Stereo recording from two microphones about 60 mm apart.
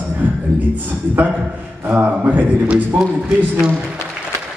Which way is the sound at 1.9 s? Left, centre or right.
Right.